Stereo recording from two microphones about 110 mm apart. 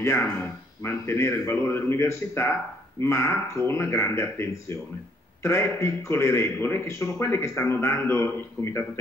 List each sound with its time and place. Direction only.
0.0 s a man's voice: 20° left (ahead or behind)